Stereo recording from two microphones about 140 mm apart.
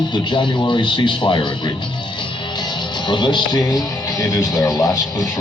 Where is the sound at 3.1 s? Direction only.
35° left (ahead or behind).